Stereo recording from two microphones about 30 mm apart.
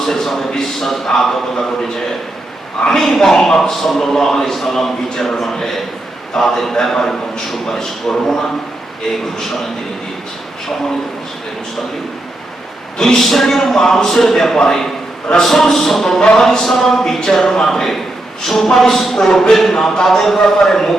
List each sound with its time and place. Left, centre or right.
0.0 s a man's voice: centre
2.9 s a man's voice: centre
13.1 s a man's voice: centre
15.4 s a man's voice: centre
17.7 s a man's voice: centre